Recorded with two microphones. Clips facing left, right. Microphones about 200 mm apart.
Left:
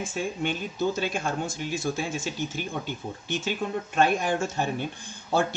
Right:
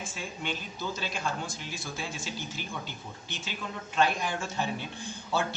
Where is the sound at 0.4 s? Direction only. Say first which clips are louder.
Left 7 dB; 50° left (ahead or behind).